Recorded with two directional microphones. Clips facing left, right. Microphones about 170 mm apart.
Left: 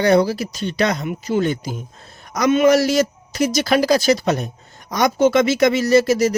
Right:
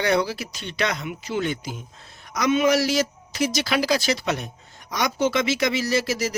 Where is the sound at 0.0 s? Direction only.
40° left (ahead or behind).